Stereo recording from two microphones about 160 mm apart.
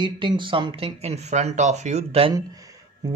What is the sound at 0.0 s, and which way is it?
Speech, 30° right (ahead or behind).